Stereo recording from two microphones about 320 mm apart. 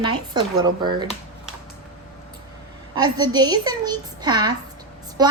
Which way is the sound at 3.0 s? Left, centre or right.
Centre.